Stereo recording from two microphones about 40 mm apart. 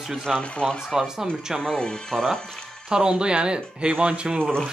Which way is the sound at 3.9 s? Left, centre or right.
Right.